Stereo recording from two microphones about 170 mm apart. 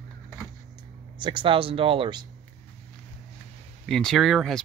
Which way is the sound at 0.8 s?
25° right (ahead or behind).